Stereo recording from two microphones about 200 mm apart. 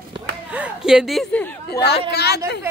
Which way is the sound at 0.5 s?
5° right (ahead or behind).